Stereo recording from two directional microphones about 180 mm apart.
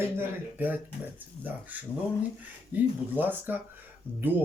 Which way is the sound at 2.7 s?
10° right (ahead or behind).